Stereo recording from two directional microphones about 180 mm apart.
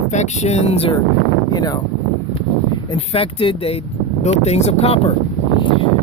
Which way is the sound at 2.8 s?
30° left (ahead or behind).